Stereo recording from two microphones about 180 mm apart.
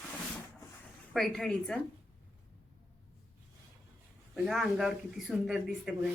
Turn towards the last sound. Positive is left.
turn(degrees=-5)  # may be behind; listen again after turning